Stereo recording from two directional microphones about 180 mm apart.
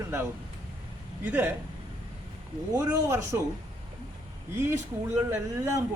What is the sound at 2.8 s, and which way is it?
Speech, 15° right (ahead or behind).